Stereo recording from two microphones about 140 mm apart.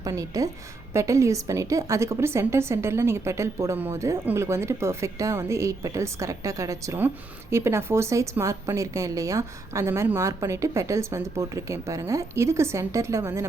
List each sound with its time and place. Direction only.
0.0 s a woman's voice: 25° right (ahead or behind)